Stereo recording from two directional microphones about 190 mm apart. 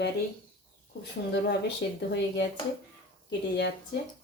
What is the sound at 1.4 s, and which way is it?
Speech, 65° left (ahead or behind).